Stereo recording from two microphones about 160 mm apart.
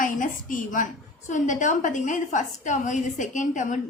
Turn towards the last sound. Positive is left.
turn(degrees=50)  # may be behind; listen again after turning